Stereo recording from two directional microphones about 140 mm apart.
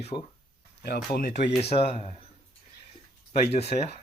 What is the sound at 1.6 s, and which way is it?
Speech, 45° left (ahead or behind).